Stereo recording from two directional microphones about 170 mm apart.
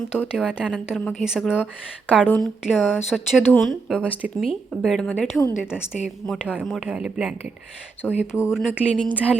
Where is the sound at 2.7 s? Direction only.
5° right (ahead or behind).